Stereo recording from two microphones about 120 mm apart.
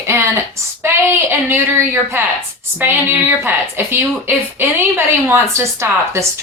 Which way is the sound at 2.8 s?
15° right (ahead or behind).